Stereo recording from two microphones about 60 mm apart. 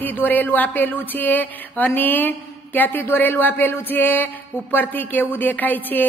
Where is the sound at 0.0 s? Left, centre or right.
Left.